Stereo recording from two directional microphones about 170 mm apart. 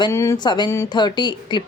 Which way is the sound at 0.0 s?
15° left (ahead or behind).